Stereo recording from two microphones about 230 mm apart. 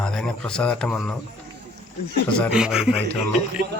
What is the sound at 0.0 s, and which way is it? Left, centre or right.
A man's voice, centre.